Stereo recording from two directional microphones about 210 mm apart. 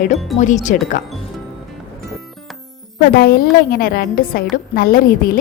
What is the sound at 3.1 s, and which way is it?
A woman's voice, 45° left (ahead or behind).